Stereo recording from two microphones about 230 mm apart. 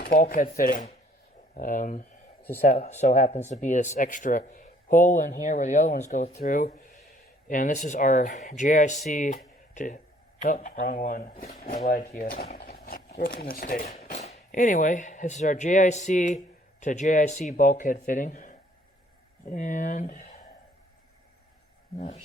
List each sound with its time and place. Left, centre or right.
0.0 s speech: left
21.9 s speech: left